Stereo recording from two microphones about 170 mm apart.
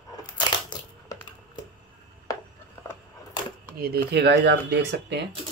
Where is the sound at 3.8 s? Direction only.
70° right (ahead or behind); by 5.2 s 90° right.